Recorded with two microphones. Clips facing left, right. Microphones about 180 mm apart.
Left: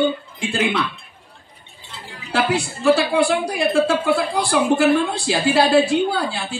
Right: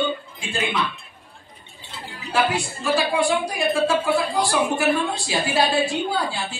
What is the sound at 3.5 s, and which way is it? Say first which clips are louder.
A woman's voice: left 3 dB; 65° left (ahead or behind).